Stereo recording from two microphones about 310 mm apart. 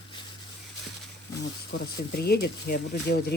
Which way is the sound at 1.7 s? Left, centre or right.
Left.